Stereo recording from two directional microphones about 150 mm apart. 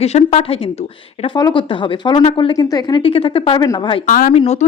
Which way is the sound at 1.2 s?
30° left (ahead or behind).